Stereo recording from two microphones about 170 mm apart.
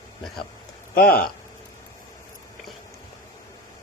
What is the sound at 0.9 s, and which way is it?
Speech, 60° left (ahead or behind).